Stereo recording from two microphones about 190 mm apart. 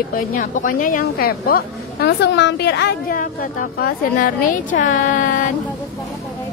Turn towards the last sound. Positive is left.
turn(degrees=45)  # may be behind; listen again after turning